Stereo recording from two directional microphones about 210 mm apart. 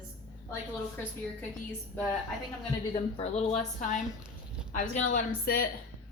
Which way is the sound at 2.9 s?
30° left (ahead or behind).